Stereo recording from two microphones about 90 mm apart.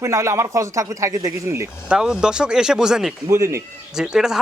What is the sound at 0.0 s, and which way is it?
Speech, 30° right (ahead or behind).